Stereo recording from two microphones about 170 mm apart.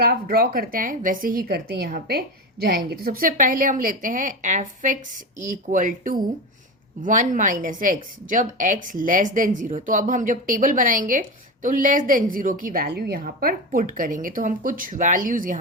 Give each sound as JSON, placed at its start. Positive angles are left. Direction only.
{"t": 0.0, "sound": "a woman's voice", "side_deg": -65}